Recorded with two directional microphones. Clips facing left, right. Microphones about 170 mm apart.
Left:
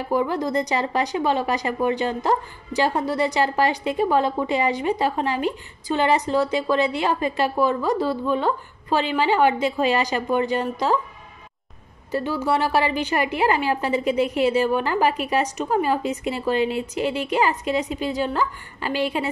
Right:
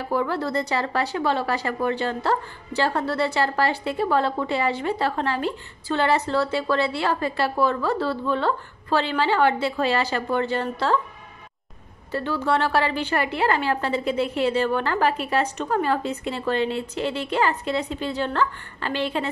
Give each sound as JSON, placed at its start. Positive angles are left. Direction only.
{"t": 0.1, "sound": "a woman's voice", "side_deg": 15}
{"t": 12.1, "sound": "a woman's voice", "side_deg": 10}